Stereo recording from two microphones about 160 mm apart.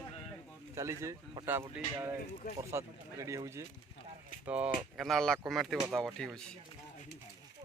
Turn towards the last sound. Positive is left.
turn(degrees=0)  # may be behind; listen again after turning